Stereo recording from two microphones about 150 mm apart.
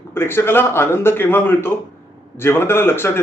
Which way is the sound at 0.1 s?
15° left (ahead or behind).